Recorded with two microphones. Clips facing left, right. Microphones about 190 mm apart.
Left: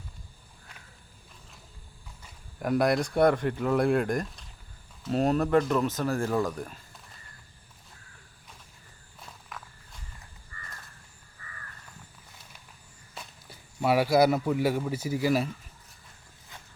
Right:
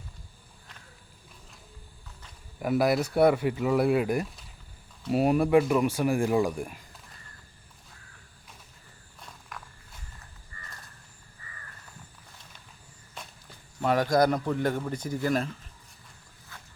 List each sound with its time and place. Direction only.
2.6 s speech: 5° right (ahead or behind)
9.5 s walk: centre (ahead or behind)
13.1 s speech: 10° left (ahead or behind)
16.5 s a sound: 20° left (ahead or behind)